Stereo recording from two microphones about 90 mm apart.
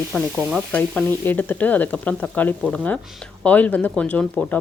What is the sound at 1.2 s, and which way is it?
Speech, 20° left (ahead or behind).